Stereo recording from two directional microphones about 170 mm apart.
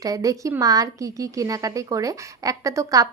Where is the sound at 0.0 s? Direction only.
20° right (ahead or behind).